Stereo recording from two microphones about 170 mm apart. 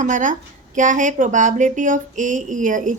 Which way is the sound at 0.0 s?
50° right (ahead or behind).